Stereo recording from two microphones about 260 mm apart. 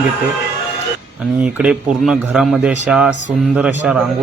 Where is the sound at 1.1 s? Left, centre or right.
Centre.